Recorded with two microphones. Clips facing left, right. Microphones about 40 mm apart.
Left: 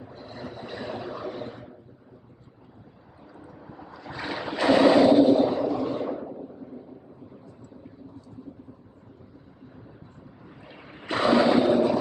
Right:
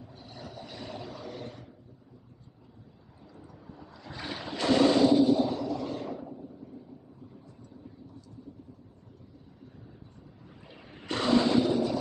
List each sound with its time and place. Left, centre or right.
0.0 s a sound: left
3.3 s ocean: left
11.1 s roar: centre; by 12.0 s left